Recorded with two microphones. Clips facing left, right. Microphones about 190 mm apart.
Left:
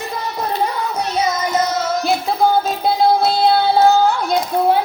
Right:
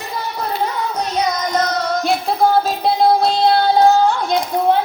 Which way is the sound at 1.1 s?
5° left (ahead or behind).